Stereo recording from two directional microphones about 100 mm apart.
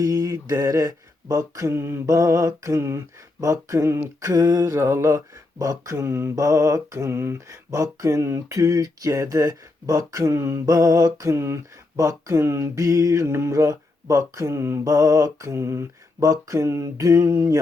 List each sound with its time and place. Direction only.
0.0 s speech: 35° right (ahead or behind)